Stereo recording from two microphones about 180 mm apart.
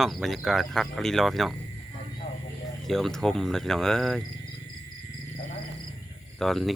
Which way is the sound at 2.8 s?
Centre (ahead or behind).